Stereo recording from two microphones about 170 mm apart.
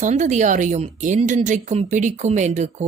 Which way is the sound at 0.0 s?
45° right (ahead or behind).